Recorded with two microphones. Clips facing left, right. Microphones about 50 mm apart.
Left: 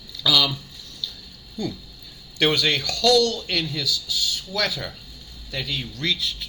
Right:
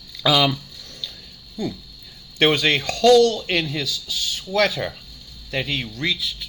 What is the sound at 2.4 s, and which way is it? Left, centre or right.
Speech, right.